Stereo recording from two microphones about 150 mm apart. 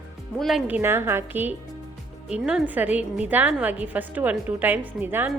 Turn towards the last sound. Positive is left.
turn(degrees=-15)  # may be behind; listen again after turning